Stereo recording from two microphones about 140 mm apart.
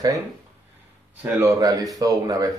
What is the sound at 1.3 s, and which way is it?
A man's voice, 25° right (ahead or behind).